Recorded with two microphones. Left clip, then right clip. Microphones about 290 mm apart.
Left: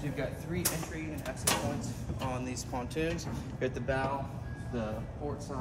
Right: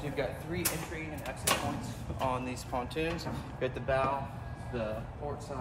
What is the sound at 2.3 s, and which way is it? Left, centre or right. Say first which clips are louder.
Speech: right 3 dB; centre.